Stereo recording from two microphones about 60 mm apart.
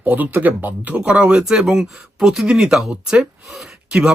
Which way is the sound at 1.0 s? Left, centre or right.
Centre.